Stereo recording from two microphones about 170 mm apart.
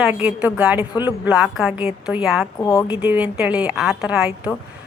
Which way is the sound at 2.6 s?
15° left (ahead or behind).